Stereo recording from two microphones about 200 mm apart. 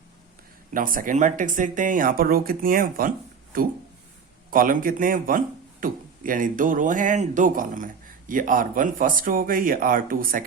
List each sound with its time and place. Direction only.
0.7 s speech: 45° right (ahead or behind)